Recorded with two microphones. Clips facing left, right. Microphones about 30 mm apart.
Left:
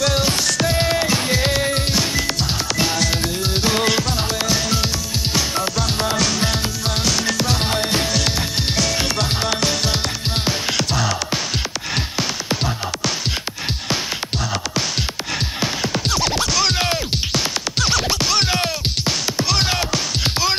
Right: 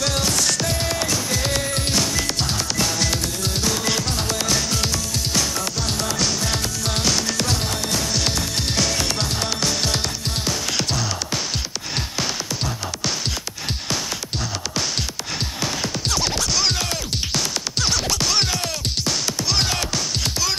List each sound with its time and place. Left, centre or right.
0.6 s music: left; by 7.5 s centre
7.6 s music: left
8.9 s music: centre
10.8 s music: centre
16.1 s scratch: centre
16.7 s music: left
17.3 s music: centre
18.5 s music: left
19.6 s music: centre
20.2 s music: left